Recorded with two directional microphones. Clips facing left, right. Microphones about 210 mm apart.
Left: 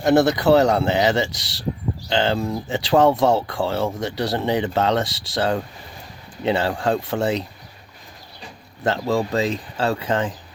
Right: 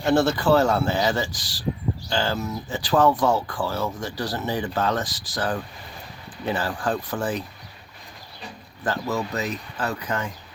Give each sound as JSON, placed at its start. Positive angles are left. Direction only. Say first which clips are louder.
{"t": 0.2, "sound": "speech", "louder": "left 4 dB", "side_deg": 20}
{"t": 8.8, "sound": "speech", "louder": "left 5 dB", "side_deg": 25}